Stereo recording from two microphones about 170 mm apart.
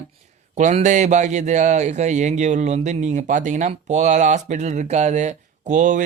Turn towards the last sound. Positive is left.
turn(degrees=-45)  # may be behind; listen again after turning